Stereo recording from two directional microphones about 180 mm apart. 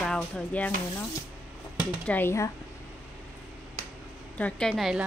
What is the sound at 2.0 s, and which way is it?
Speech, 10° left (ahead or behind).